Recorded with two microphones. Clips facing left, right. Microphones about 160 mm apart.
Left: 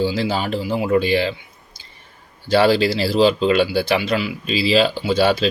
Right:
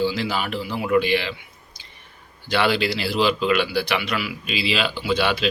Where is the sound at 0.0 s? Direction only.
30° left (ahead or behind).